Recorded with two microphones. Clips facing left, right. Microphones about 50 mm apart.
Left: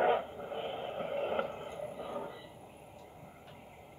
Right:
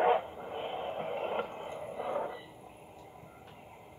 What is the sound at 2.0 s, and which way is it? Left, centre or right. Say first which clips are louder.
Train: right 9 dB; right.